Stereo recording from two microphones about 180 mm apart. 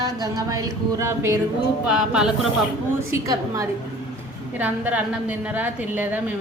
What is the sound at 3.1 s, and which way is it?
A woman's voice, 20° right (ahead or behind).